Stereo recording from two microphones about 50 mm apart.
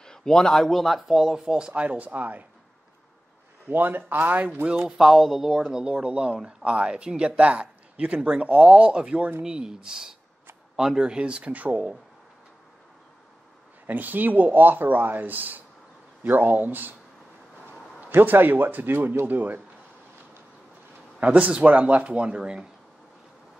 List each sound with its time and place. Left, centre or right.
0.0 s speech: centre
1.7 s speech: right
3.6 s speech: right
4.8 s speech: centre
5.6 s speech: centre; by 11.9 s right
13.8 s speech: right
18.1 s speech: right
21.2 s speech: right